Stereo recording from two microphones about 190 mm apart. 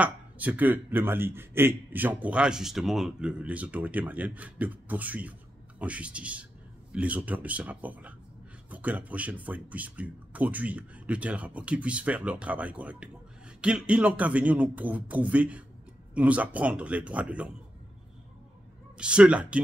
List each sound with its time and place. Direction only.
0.0 s a man's voice: 10° right (ahead or behind)
18.9 s speech: 5° right (ahead or behind)